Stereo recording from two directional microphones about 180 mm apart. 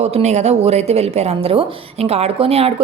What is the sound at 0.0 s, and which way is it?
A woman's voice, 35° right (ahead or behind).